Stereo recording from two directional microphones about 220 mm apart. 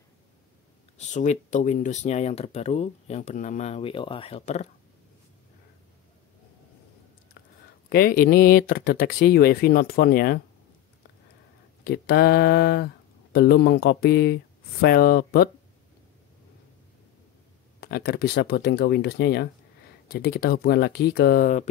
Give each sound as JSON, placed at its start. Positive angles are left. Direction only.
{"t": 0.9, "sound": "speech", "side_deg": 30}
{"t": 7.9, "sound": "speech", "side_deg": 40}
{"t": 11.8, "sound": "speech", "side_deg": 45}
{"t": 17.7, "sound": "speech", "side_deg": 45}